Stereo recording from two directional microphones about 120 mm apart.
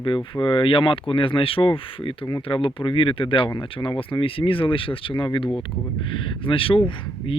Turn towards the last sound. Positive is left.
turn(degrees=50)  # may be behind; listen again after turning